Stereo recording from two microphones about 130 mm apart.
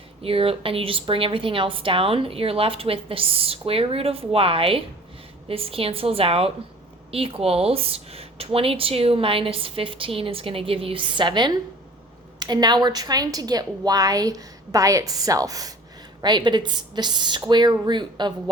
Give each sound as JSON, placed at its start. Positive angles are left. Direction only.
{"t": 0.2, "sound": "a woman's voice", "side_deg": -45}